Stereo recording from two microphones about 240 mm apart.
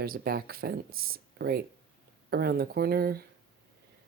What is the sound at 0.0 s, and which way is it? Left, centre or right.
Speech, right.